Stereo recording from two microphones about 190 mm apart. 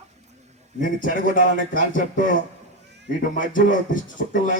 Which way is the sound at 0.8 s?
45° left (ahead or behind).